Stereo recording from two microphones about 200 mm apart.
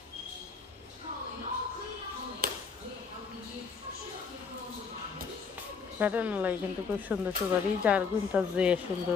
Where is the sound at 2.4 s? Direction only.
45° right (ahead or behind).